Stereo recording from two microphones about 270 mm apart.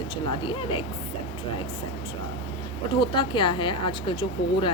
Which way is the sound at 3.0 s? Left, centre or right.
Centre.